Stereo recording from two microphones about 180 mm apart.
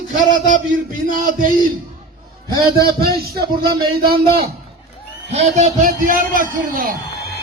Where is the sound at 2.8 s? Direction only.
60° right (ahead or behind).